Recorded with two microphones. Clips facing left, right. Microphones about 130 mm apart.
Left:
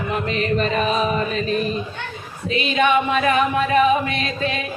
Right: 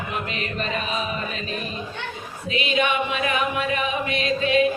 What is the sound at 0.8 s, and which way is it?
Music, 45° left (ahead or behind).